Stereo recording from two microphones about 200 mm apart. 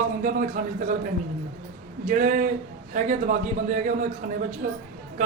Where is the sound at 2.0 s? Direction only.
40° right (ahead or behind).